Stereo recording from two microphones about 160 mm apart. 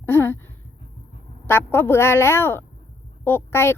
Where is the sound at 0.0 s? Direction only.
15° left (ahead or behind).